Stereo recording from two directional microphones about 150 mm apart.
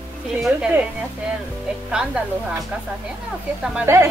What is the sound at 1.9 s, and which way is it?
Speech, 5° right (ahead or behind).